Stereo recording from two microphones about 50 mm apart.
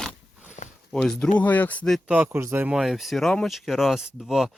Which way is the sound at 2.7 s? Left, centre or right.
Centre.